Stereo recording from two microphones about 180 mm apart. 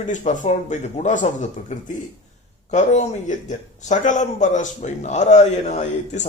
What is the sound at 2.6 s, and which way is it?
A man's voice, 40° left (ahead or behind).